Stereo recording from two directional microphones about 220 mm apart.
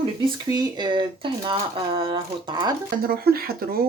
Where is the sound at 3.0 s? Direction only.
40° right (ahead or behind).